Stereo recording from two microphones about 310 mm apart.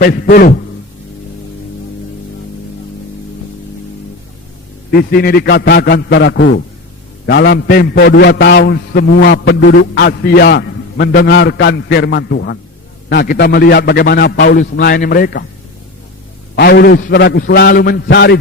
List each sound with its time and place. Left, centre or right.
0.0 s a man's voice: left
4.9 s a man's voice: left
16.6 s a man's voice: left